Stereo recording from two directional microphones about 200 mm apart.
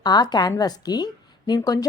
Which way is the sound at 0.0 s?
20° left (ahead or behind).